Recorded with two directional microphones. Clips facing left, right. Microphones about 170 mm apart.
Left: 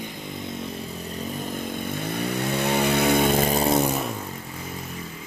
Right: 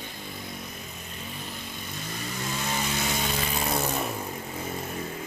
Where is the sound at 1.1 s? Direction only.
50° left (ahead or behind).